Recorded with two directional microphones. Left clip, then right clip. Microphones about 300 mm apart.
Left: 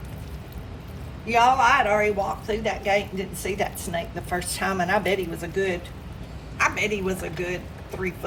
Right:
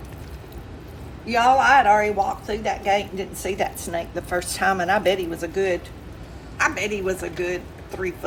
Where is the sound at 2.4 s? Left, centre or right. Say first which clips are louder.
Right 2 dB; centre.